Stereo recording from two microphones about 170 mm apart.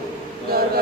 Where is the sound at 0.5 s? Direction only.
60° right (ahead or behind).